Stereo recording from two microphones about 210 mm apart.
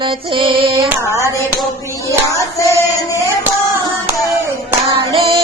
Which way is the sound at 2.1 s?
15° left (ahead or behind).